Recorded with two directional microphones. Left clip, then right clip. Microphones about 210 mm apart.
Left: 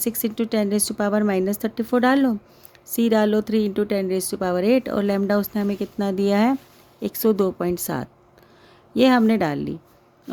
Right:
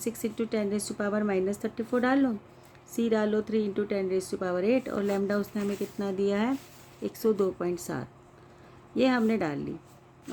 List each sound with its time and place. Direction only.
0.0 s speech: 50° left (ahead or behind)